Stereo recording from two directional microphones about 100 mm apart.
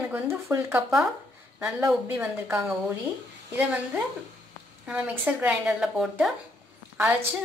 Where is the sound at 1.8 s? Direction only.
25° right (ahead or behind).